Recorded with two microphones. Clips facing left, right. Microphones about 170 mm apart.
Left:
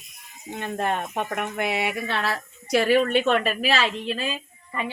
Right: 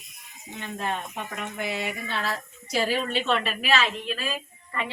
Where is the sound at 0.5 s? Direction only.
55° left (ahead or behind); by 4.3 s 25° left (ahead or behind).